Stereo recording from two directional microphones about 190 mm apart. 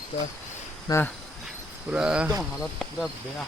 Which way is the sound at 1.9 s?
5° right (ahead or behind).